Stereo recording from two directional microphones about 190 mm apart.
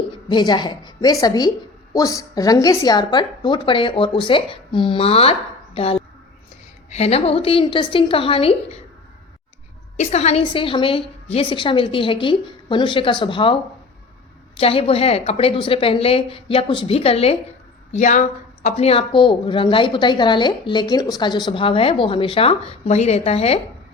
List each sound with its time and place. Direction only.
0.3 s a woman's voice: 20° left (ahead or behind)
10.0 s a woman's voice: 35° left (ahead or behind)